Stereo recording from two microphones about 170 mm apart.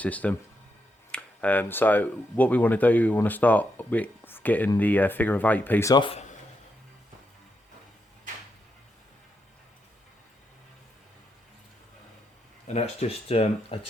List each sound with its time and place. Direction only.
0.0 s speech: 10° left (ahead or behind)
5.9 s a man's voice: 30° left (ahead or behind)
12.6 s speech: 40° left (ahead or behind)